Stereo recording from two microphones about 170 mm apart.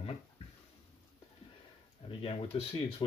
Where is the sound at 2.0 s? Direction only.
35° left (ahead or behind).